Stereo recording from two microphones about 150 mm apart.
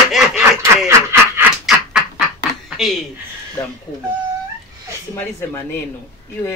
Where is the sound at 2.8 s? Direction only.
Centre (ahead or behind).